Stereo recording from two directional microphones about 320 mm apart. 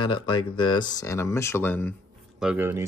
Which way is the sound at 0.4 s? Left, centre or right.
Centre.